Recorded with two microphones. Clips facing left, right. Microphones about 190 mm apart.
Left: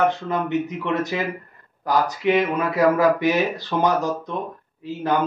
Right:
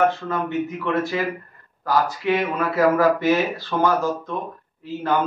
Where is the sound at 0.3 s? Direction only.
20° left (ahead or behind).